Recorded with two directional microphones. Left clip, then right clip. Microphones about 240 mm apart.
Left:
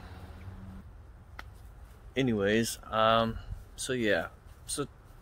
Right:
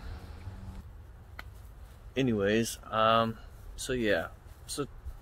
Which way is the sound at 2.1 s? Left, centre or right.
Centre.